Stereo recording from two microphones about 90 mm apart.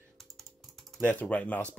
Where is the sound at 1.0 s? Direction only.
15° left (ahead or behind).